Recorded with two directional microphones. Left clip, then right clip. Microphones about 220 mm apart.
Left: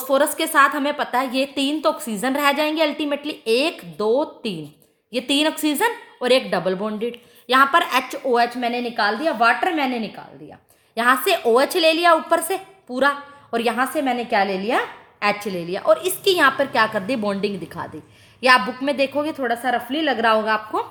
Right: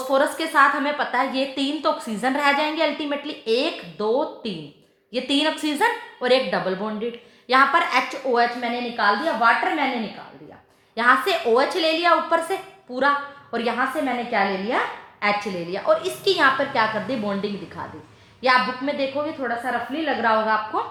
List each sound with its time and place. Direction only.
0.1 s a woman's voice: 35° left (ahead or behind)
10.9 s a woman's voice: 35° left (ahead or behind)